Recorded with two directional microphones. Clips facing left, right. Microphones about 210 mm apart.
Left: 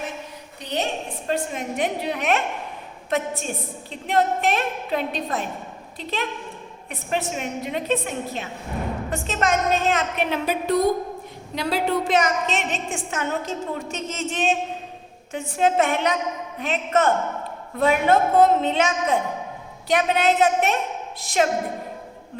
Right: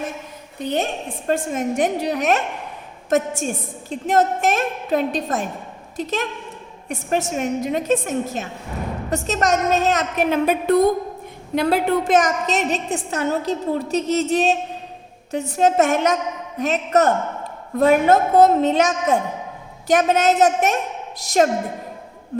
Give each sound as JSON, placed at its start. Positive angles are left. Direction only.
{"t": 0.6, "sound": "a woman's voice", "side_deg": -50}